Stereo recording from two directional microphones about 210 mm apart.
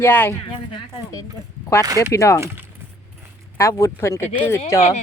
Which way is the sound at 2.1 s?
15° left (ahead or behind).